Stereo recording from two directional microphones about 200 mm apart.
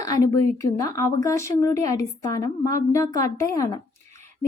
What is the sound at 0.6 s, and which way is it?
A woman's voice, 15° left (ahead or behind).